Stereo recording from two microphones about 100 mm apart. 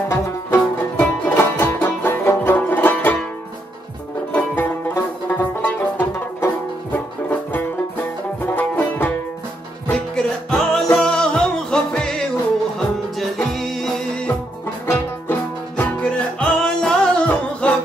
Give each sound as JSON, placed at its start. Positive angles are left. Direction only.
{"t": 0.1, "sound": "music", "side_deg": 20}
{"t": 4.3, "sound": "music", "side_deg": 20}
{"t": 9.8, "sound": "music", "side_deg": 5}
{"t": 15.7, "sound": "music", "side_deg": 15}